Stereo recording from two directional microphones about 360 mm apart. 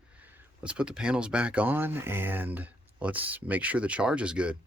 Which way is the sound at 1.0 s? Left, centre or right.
Centre.